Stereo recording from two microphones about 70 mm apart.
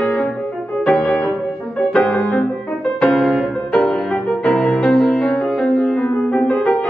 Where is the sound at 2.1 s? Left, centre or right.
Left.